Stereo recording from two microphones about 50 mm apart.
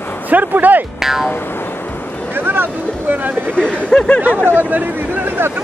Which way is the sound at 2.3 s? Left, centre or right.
Right.